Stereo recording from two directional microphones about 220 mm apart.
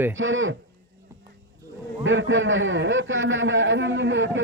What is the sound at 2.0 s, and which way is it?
Speech, 60° right (ahead or behind).